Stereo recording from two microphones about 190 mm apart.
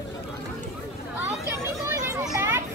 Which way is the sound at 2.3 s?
15° right (ahead or behind).